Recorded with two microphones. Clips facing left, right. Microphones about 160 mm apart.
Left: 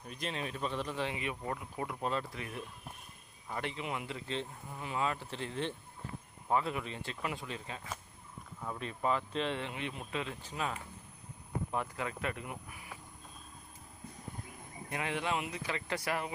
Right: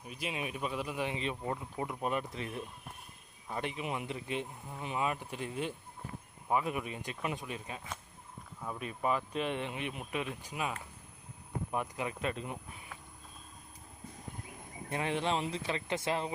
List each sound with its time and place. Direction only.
0.0 s speech: 10° right (ahead or behind)
1.1 s speech: 25° right (ahead or behind)
8.8 s speech: 15° right (ahead or behind)
14.8 s speech: 25° right (ahead or behind)